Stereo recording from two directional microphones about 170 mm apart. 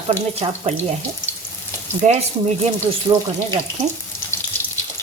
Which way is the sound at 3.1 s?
30° right (ahead or behind).